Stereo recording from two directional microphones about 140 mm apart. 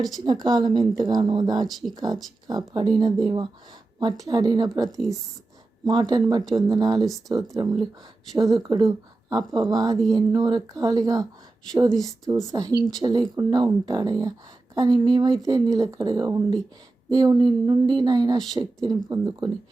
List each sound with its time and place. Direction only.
0.4 s speech: 30° right (ahead or behind)
7.0 s speech: centre (ahead or behind)
7.5 s speech: 30° right (ahead or behind)
11.9 s speech: centre (ahead or behind)
12.5 s speech: 25° right (ahead or behind)